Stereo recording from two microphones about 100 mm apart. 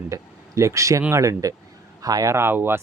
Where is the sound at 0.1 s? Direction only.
30° right (ahead or behind).